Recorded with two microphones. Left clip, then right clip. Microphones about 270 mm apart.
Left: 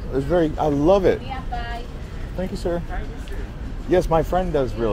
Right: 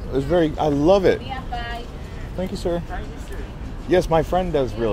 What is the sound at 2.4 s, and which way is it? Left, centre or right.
Speech, centre.